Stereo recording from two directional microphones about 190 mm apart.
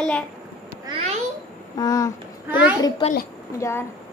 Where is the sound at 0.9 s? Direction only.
35° right (ahead or behind).